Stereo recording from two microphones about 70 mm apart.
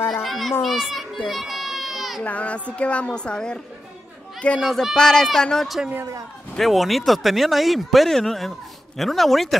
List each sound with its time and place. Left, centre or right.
0.1 s a child's voice: centre
1.3 s baby cry: centre
2.2 s a woman's voice: centre
4.6 s a woman's voice: centre